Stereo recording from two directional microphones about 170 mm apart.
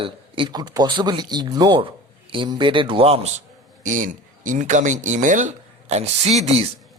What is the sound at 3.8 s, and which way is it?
Speech, 50° right (ahead or behind).